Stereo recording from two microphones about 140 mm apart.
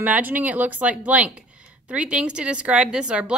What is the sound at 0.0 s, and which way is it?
Speech, 10° right (ahead or behind).